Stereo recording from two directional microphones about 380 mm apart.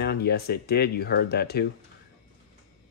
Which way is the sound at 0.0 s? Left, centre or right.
Left.